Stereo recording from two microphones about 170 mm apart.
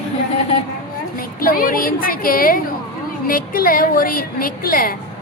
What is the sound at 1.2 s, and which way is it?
A woman's voice, 55° left (ahead or behind).